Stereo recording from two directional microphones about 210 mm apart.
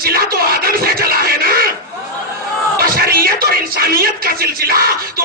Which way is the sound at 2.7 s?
45° right (ahead or behind).